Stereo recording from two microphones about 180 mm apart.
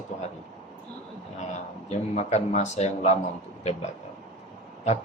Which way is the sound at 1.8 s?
40° left (ahead or behind).